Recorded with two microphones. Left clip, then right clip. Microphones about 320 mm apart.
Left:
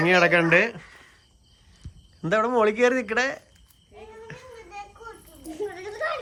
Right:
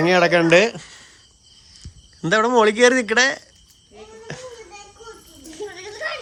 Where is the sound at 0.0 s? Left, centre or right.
Centre.